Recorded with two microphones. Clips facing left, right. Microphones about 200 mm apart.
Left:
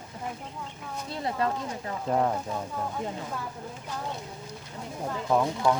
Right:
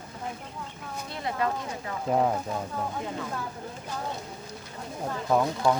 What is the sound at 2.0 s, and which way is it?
Speech, 5° right (ahead or behind).